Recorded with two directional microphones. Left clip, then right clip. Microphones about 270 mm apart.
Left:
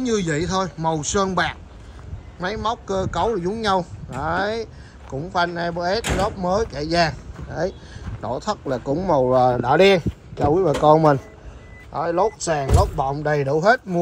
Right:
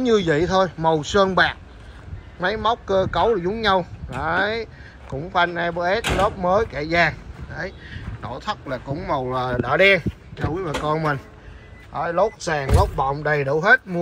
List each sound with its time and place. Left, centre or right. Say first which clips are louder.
0.0 s a man's voice: right 4 dB; centre
11.9 s speech: even; centre